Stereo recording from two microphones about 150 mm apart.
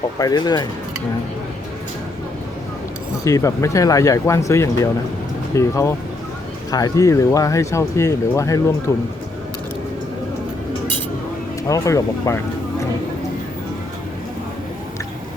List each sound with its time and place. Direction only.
0.2 s speech: 25° left (ahead or behind)
3.2 s speech: 20° left (ahead or behind)
11.7 s speech: 20° left (ahead or behind)